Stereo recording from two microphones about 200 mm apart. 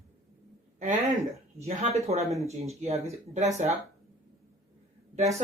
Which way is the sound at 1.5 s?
35° right (ahead or behind).